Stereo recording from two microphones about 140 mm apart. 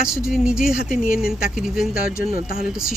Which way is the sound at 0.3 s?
5° right (ahead or behind).